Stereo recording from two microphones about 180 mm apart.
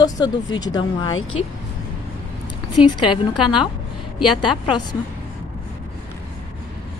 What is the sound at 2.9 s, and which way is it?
Speech, 25° left (ahead or behind).